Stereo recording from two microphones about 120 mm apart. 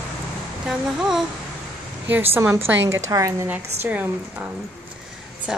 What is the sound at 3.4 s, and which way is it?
Speech, 15° right (ahead or behind).